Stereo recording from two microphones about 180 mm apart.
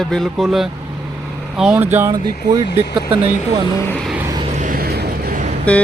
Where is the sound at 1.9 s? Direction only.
15° right (ahead or behind).